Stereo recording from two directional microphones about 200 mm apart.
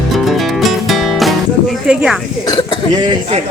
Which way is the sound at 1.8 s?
5° right (ahead or behind).